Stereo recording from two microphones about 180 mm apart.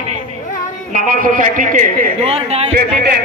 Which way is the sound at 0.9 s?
50° right (ahead or behind).